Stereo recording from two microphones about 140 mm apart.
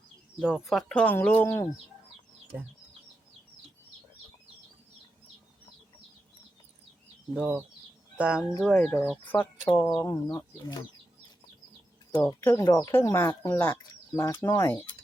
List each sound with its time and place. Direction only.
0.3 s speech: centre (ahead or behind)
7.3 s speech: 10° right (ahead or behind)
9.3 s speech: 15° left (ahead or behind)
12.3 s speech: 20° left (ahead or behind)